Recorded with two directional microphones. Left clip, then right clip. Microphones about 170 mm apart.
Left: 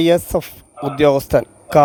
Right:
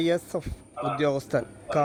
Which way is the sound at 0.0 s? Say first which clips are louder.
Left 11 dB; 40° left (ahead or behind).